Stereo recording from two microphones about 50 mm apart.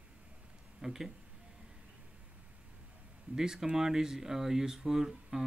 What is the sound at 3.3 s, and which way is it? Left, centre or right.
Speech, centre.